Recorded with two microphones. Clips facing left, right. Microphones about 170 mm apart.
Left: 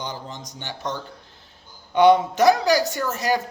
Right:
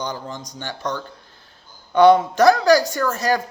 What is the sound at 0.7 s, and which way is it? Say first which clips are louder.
Speech: right 3 dB; 20° left (ahead or behind).